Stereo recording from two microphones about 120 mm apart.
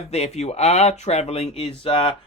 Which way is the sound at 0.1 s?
65° left (ahead or behind).